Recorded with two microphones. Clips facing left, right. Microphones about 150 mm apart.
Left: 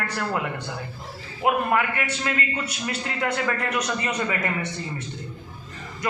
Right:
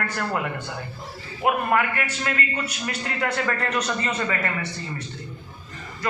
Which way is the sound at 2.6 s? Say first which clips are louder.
Even; 20° left (ahead or behind).